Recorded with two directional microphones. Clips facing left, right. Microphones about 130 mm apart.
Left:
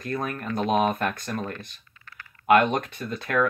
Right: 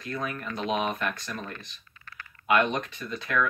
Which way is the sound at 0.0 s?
50° left (ahead or behind).